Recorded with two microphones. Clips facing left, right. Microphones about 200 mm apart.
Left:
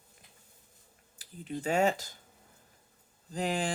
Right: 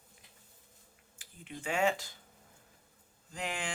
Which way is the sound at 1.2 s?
35° left (ahead or behind).